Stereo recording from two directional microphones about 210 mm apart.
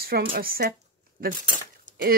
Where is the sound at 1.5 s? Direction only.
40° right (ahead or behind).